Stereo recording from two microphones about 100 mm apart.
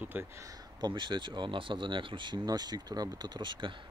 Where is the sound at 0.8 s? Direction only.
50° right (ahead or behind).